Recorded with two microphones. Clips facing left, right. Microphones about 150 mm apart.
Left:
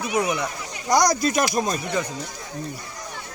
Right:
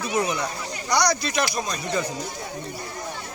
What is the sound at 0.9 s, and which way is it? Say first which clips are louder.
Speech: left 4 dB; 45° left (ahead or behind).